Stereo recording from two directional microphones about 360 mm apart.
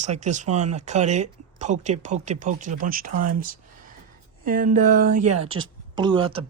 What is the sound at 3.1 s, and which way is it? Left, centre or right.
Speech, right.